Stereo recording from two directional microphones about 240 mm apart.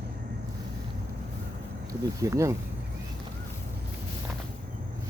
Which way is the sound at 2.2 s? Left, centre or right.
Centre.